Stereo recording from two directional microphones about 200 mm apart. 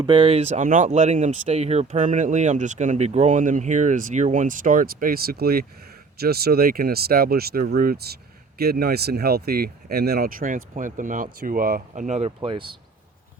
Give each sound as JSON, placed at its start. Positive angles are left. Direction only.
{"t": 0.0, "sound": "speech", "side_deg": -25}